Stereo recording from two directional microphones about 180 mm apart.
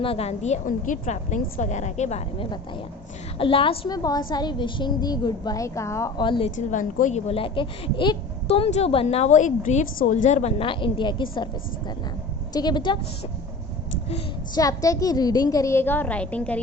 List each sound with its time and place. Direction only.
0.0 s a woman's voice: 35° left (ahead or behind)
6.7 s speech: 45° left (ahead or behind); by 11.4 s 25° left (ahead or behind)
12.5 s a woman's voice: 25° left (ahead or behind)
14.5 s a woman's voice: 20° left (ahead or behind)